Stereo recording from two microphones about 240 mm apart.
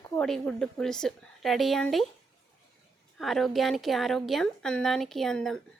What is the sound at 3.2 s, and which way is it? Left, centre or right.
A woman's voice, centre.